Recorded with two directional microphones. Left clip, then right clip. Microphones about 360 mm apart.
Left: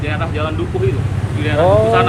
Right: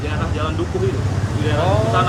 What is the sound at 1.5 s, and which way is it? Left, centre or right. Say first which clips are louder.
Speech: left 7 dB; centre.